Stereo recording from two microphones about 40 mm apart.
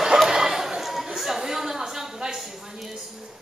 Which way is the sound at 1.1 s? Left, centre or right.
Centre.